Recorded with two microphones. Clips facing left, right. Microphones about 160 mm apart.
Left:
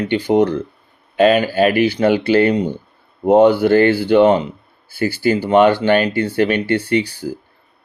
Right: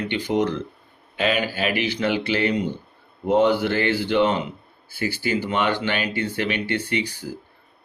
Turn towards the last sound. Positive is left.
turn(degrees=40)  # may be behind; listen again after turning